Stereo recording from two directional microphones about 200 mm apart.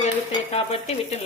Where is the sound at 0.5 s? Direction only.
30° left (ahead or behind).